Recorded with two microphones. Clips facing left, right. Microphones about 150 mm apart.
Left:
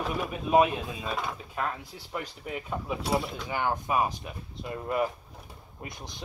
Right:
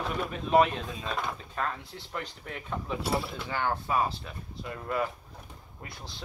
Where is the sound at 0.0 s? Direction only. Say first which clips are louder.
Left 1 dB; 10° left (ahead or behind).